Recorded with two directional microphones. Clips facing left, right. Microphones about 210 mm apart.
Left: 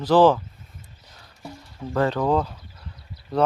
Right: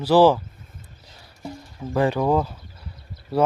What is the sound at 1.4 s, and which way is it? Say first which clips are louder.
Speech: right 2 dB; 10° right (ahead or behind).